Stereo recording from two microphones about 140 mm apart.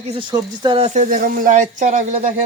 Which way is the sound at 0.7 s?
50° right (ahead or behind).